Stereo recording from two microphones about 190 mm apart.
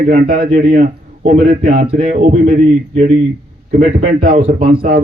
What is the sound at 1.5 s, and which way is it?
Speech, 40° right (ahead or behind).